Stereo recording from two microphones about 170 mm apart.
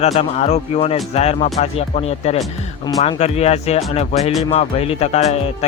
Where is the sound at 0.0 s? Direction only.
40° left (ahead or behind).